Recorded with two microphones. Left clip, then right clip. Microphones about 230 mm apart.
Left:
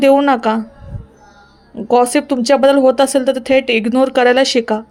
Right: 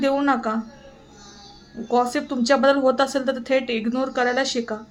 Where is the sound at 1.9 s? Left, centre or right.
Left.